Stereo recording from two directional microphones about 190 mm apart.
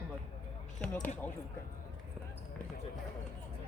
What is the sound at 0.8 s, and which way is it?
Speech, 5° left (ahead or behind).